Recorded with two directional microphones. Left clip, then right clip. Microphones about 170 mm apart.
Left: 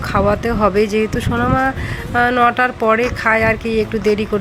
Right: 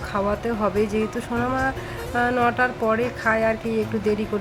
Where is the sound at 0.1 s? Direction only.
25° left (ahead or behind).